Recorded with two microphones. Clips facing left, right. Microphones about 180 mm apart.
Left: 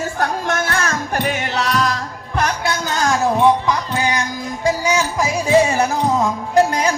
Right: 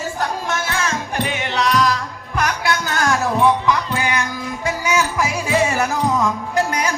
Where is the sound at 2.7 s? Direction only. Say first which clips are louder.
Even; 20° left (ahead or behind).